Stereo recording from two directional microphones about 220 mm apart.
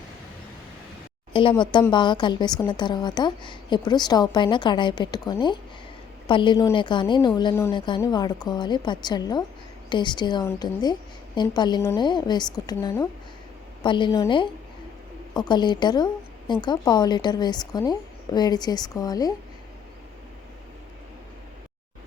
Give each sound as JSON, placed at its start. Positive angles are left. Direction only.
{"t": 1.3, "sound": "a woman's voice", "side_deg": 25}